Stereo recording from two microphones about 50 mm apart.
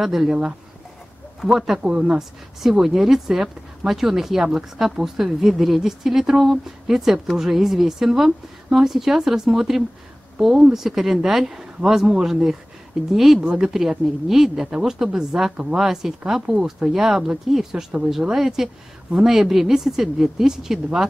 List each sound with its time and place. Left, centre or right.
0.0 s speech: centre